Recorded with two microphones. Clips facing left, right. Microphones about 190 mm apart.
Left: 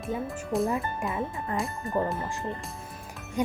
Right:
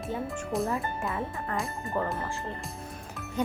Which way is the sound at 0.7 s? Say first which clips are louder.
Left 2 dB; 15° left (ahead or behind).